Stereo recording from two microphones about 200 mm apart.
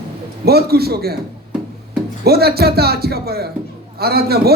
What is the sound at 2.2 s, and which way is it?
A man's voice, 50° right (ahead or behind).